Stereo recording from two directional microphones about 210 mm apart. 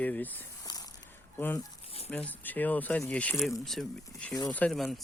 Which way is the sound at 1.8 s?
30° left (ahead or behind).